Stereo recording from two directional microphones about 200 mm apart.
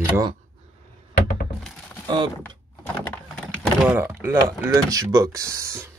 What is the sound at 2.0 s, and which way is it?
Speech, 25° right (ahead or behind).